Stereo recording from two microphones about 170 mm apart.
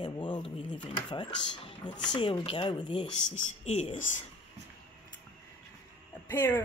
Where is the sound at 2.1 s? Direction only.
30° left (ahead or behind).